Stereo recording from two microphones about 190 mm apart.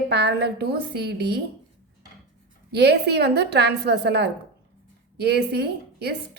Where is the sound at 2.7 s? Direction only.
60° right (ahead or behind).